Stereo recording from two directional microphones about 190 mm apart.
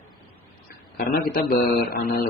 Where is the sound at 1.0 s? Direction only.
50° left (ahead or behind).